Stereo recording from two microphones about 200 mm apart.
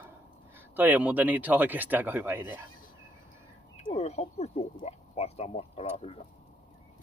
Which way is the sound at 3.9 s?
30° left (ahead or behind).